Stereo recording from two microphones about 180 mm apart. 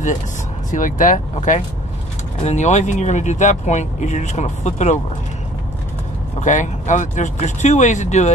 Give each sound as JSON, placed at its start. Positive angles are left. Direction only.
{"t": 0.7, "sound": "speech", "side_deg": 45}
{"t": 6.4, "sound": "speech", "side_deg": 45}